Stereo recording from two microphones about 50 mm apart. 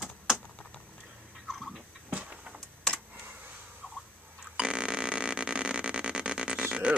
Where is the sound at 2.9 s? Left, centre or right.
Centre.